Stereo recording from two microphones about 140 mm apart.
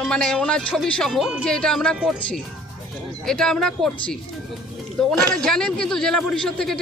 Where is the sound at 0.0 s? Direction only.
5° left (ahead or behind).